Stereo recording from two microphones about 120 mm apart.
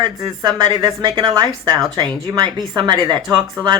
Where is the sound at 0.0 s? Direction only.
35° right (ahead or behind).